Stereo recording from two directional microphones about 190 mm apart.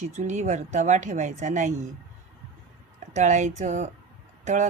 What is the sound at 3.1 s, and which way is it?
Speech, 40° right (ahead or behind).